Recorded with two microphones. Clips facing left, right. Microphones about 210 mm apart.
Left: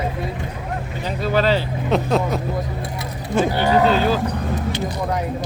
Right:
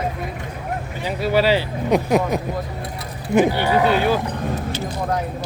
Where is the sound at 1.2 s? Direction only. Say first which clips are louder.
Right 1 dB; 10° right (ahead or behind).